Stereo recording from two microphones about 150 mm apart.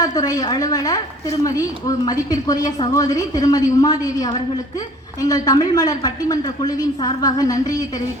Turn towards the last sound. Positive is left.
turn(degrees=25)  # may be behind; listen again after turning